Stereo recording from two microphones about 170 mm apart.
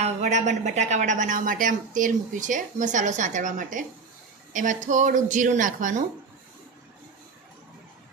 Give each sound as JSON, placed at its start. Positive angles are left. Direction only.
{"t": 0.0, "sound": "speech", "side_deg": -45}